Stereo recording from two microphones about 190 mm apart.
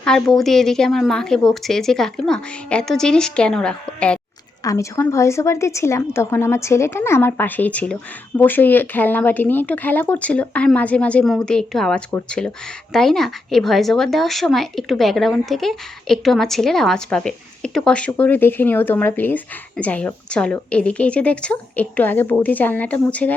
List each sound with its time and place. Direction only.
0.0 s speech: centre (ahead or behind)
4.6 s a woman's voice: 15° left (ahead or behind)